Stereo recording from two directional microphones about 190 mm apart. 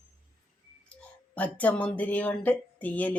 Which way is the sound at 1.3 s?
10° left (ahead or behind).